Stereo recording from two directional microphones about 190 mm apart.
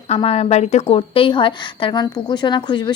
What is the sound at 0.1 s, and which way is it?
A woman's voice, 30° left (ahead or behind).